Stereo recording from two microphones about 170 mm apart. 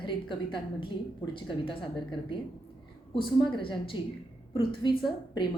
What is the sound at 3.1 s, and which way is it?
A woman's voice, 30° left (ahead or behind).